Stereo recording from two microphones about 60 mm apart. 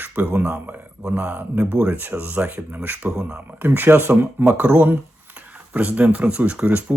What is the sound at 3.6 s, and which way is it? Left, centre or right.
Speech, right.